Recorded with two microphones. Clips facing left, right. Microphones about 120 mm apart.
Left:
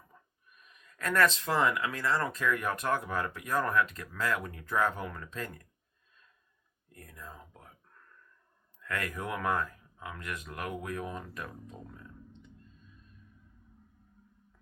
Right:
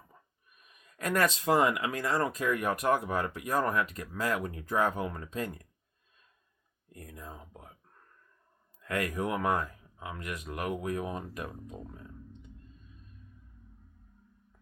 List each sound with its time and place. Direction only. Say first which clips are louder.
0.9 s speech: left 1 dB; 15° right (ahead or behind)
6.9 s speech: right 3 dB; 20° right (ahead or behind)
8.9 s speech: right 4 dB; 15° right (ahead or behind)